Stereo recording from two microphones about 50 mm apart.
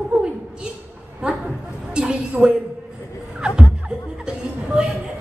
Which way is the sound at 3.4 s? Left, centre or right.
Centre.